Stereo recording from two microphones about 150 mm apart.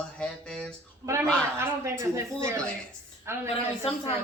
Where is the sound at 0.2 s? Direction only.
5° left (ahead or behind).